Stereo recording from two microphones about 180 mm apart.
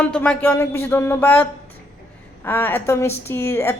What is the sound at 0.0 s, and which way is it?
A woman's voice, 5° left (ahead or behind).